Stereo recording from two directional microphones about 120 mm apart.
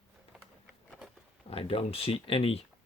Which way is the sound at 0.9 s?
Centre (ahead or behind).